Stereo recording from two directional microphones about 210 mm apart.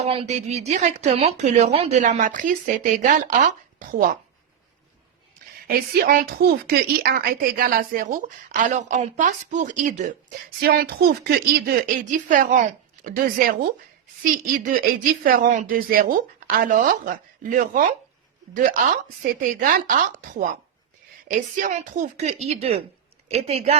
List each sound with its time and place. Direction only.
0.0 s a woman's voice: 30° right (ahead or behind)
5.6 s a woman's voice: 45° right (ahead or behind)
10.6 s a woman's voice: 45° right (ahead or behind)
15.2 s a woman's voice: 40° right (ahead or behind)